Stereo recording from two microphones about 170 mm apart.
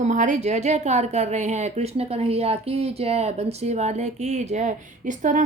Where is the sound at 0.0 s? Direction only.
45° right (ahead or behind).